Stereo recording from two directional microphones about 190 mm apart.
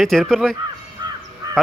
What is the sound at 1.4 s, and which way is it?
Honk, 15° right (ahead or behind).